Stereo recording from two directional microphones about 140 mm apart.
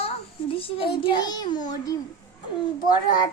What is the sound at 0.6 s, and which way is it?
A child's voice, 40° left (ahead or behind).